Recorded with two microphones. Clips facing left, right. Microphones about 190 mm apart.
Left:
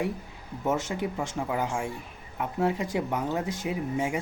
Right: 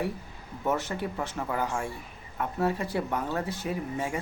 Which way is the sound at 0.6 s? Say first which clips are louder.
Left 1 dB; 15° left (ahead or behind).